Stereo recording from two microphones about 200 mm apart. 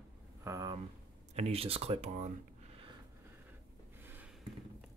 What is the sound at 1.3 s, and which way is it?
Speech, 30° right (ahead or behind).